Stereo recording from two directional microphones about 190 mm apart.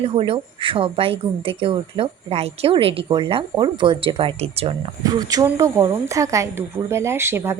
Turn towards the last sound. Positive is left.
turn(degrees=-15)  # may be behind; listen again after turning